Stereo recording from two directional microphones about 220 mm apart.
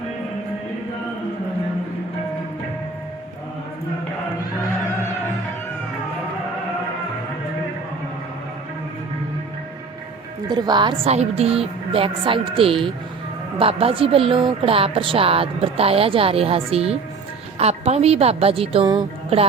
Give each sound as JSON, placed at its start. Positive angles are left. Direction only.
{"t": 10.5, "sound": "a woman's voice", "side_deg": -20}